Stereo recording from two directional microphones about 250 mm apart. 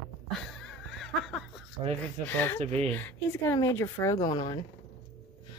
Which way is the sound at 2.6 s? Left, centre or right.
Right.